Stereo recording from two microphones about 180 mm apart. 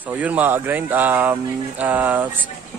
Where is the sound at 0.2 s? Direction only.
10° right (ahead or behind).